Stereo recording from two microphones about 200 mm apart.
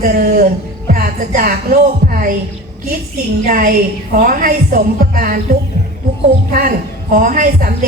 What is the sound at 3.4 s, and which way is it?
Music, 45° right (ahead or behind).